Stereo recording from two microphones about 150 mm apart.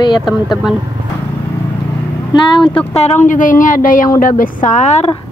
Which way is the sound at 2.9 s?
50° left (ahead or behind).